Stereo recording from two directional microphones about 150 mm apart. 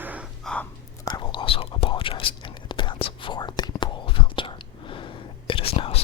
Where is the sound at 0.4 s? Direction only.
10° left (ahead or behind).